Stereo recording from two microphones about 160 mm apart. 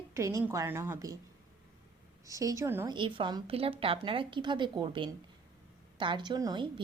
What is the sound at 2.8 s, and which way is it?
A woman's voice, 30° right (ahead or behind).